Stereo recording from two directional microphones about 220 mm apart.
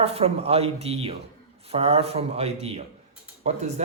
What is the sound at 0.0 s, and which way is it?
A man's voice, 25° right (ahead or behind).